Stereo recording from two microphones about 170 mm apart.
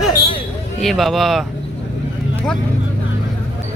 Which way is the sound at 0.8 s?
Centre (ahead or behind).